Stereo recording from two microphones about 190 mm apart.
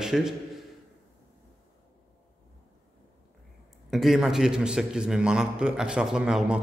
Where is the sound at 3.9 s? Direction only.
Centre (ahead or behind).